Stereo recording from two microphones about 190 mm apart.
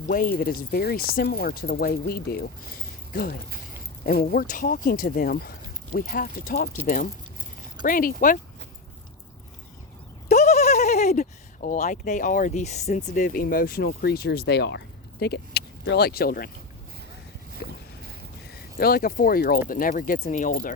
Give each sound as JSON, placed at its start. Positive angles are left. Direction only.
{"t": 0.1, "sound": "speech", "side_deg": 50}
{"t": 10.2, "sound": "speech", "side_deg": 35}
{"t": 18.8, "sound": "speech", "side_deg": 50}